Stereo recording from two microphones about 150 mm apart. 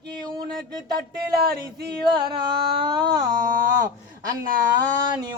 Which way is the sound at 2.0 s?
30° right (ahead or behind).